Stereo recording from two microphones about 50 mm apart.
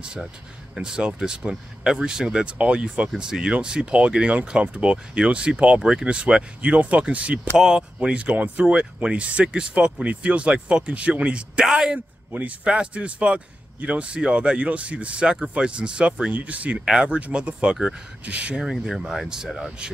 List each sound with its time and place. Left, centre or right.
0.7 s a man's voice: centre
7.5 s a man's voice: centre
11.6 s speech: centre
12.3 s a man's voice: right
18.6 s a man's voice: centre